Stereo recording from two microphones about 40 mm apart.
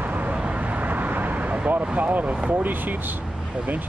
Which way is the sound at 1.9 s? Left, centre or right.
Right.